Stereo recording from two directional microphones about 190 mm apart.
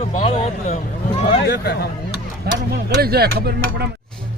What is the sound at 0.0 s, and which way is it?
Speech, 35° left (ahead or behind).